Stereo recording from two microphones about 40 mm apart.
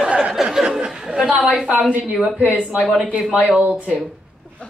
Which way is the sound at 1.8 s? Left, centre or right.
Centre.